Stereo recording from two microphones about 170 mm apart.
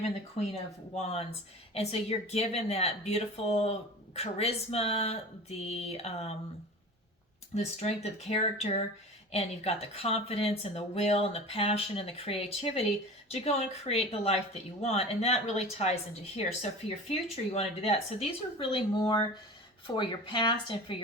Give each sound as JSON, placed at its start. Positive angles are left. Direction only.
{"t": 0.9, "sound": "speech", "side_deg": 35}
{"t": 7.5, "sound": "speech", "side_deg": 40}
{"t": 17.1, "sound": "speech", "side_deg": 40}